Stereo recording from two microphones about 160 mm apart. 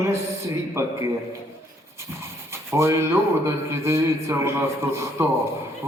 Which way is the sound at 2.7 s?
15° right (ahead or behind).